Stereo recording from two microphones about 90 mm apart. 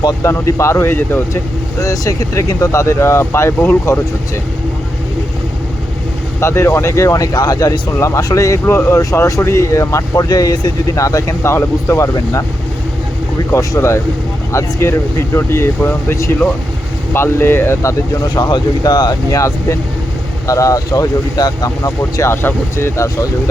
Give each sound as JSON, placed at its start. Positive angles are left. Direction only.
{"t": 0.2, "sound": "speech", "side_deg": 35}
{"t": 1.8, "sound": "speech", "side_deg": 40}
{"t": 6.4, "sound": "speech", "side_deg": 30}
{"t": 13.5, "sound": "speech", "side_deg": 30}
{"t": 17.2, "sound": "speech", "side_deg": 25}
{"t": 18.3, "sound": "speech", "side_deg": 55}
{"t": 19.3, "sound": "speech", "side_deg": 35}